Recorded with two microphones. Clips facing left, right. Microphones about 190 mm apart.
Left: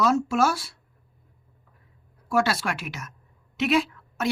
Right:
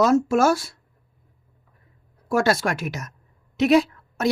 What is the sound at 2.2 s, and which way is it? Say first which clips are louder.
Speech: right 4 dB; 45° right (ahead or behind).